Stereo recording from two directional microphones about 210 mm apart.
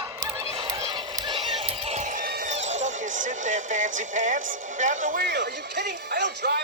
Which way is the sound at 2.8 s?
35° right (ahead or behind).